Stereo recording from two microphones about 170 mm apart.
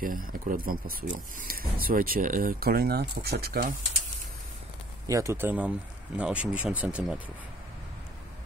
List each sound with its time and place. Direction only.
0.0 s speech: 55° right (ahead or behind)
5.0 s speech: 20° right (ahead or behind)